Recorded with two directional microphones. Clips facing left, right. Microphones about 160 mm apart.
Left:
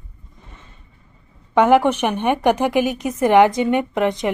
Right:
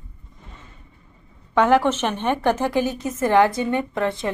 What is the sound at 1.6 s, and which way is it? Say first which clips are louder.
A woman's voice: left 3 dB; 15° left (ahead or behind).